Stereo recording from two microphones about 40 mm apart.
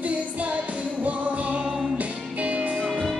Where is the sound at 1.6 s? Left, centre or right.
Centre.